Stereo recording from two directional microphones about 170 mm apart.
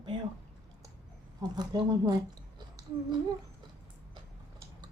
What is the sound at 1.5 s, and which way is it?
Speech, 25° right (ahead or behind).